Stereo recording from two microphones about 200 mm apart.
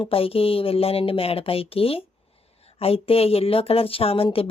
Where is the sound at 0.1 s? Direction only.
30° left (ahead or behind).